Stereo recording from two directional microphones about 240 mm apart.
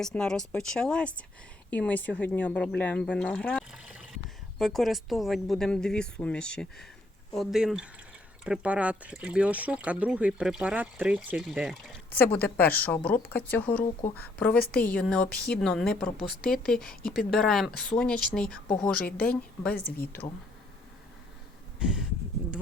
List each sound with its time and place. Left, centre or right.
0.0 s speech: centre
18.9 s speech: left
19.2 s speech: centre
19.7 s speech: left
21.8 s a sound: centre